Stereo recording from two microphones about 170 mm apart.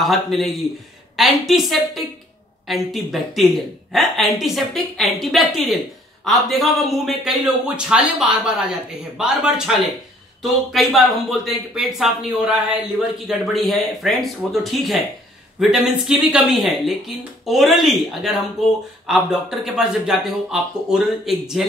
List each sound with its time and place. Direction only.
0.0 s a woman's voice: centre (ahead or behind)